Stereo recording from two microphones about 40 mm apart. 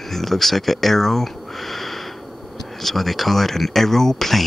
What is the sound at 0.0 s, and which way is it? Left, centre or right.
Speech, centre.